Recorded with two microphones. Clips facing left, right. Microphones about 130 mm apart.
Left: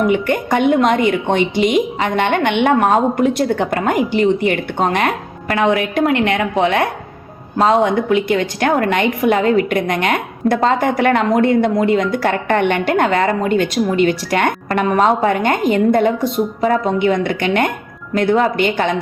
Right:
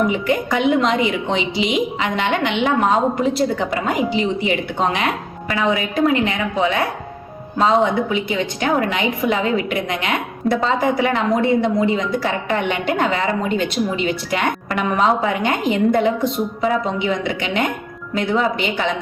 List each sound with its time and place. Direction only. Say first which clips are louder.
0.1 s a woman's voice: left 3 dB; 60° left (ahead or behind)
7.9 s a woman's voice: left 5 dB; 50° left (ahead or behind)